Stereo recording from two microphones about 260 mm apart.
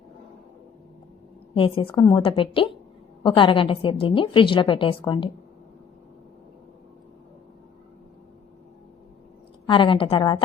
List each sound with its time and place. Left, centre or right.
1.5 s a woman's voice: left
9.6 s a woman's voice: centre